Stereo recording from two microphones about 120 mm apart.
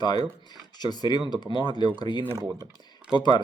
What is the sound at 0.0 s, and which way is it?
Speech, 35° left (ahead or behind).